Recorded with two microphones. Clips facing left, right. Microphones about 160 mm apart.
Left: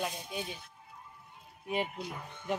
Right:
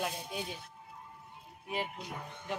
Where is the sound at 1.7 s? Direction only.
20° left (ahead or behind).